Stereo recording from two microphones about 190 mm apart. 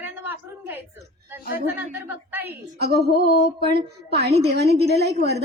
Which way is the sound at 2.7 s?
60° right (ahead or behind).